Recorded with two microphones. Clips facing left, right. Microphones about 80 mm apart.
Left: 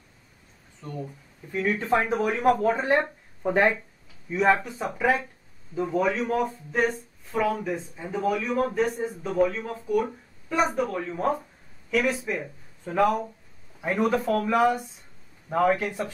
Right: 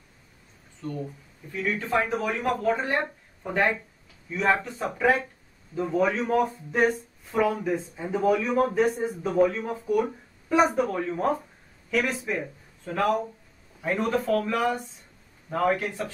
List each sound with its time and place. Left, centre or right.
0.8 s speech: centre
2.6 s speech: left
4.5 s speech: centre
12.4 s a man's voice: centre